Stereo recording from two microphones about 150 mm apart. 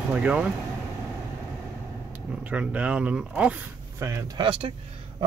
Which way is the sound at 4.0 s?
30° right (ahead or behind).